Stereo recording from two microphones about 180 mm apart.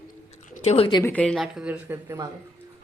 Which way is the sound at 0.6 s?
35° left (ahead or behind).